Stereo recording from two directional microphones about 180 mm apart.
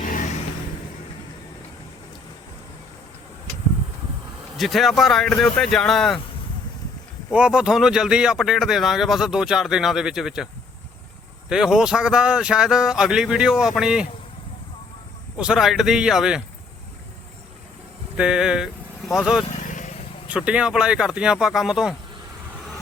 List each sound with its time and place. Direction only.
0.0 s vehicle: 45° left (ahead or behind)
4.5 s speech: centre (ahead or behind)
7.3 s speech: 5° right (ahead or behind)
15.4 s speech: 5° right (ahead or behind)
18.2 s speech: 5° right (ahead or behind)
19.5 s vehicle: 45° left (ahead or behind)
20.3 s speech: 5° right (ahead or behind)